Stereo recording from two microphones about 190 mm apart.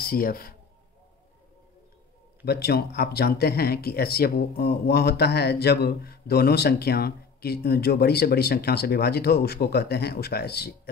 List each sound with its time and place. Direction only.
0.0 s a man's voice: 50° left (ahead or behind)
2.4 s speech: 60° left (ahead or behind)